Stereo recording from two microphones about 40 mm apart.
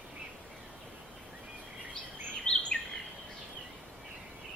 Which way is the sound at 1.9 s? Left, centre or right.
Centre.